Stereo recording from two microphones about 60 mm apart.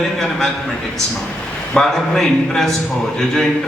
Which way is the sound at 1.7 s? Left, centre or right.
Centre.